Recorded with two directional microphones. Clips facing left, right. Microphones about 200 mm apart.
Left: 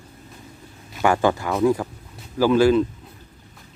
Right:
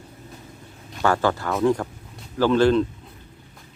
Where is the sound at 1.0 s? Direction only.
15° left (ahead or behind).